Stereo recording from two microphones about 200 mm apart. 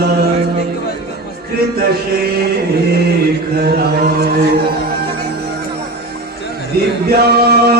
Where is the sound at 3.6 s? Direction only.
50° right (ahead or behind).